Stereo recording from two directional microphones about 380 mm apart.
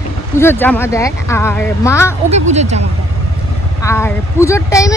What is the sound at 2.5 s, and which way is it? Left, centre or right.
Speech, centre.